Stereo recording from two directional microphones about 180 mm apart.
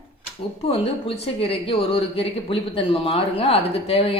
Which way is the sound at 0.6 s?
35° left (ahead or behind).